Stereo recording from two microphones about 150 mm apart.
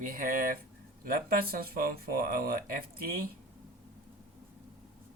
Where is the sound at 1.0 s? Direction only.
80° right.